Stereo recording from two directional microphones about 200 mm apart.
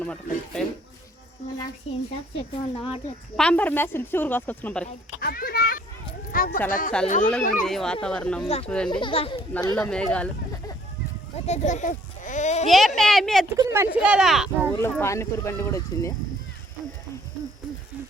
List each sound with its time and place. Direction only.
0.0 s speech: 5° left (ahead or behind)
2.7 s speech: 30° left (ahead or behind)
3.3 s speech: 5° left (ahead or behind)
5.2 s children playing: 50° left (ahead or behind)
6.3 s a sound: 45° left (ahead or behind)
6.7 s speech: 40° left (ahead or behind)
7.6 s speech: centre (ahead or behind)
8.9 s speech: 25° left (ahead or behind)
9.5 s speech: 10° left (ahead or behind)
9.9 s speech: 5° left (ahead or behind)
11.4 s a child's voice: 35° left (ahead or behind)
12.6 s speech: centre (ahead or behind)
13.6 s speech: 15° right (ahead or behind)
14.7 s speech: 10° left (ahead or behind)